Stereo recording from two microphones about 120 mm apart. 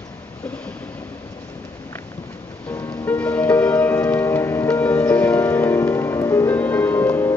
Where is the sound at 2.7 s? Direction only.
25° left (ahead or behind).